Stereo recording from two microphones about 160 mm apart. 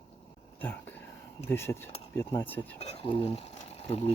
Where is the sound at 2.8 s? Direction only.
40° left (ahead or behind).